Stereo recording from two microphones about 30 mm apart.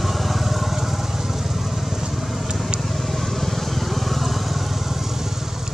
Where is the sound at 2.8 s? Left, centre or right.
Centre.